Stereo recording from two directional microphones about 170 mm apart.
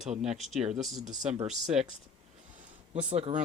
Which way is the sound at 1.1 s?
45° right (ahead or behind).